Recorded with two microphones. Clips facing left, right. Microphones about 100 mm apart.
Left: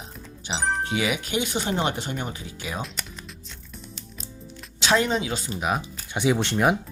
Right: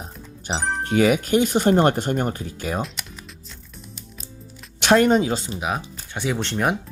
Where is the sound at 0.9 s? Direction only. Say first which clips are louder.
Right 8 dB; 45° right (ahead or behind).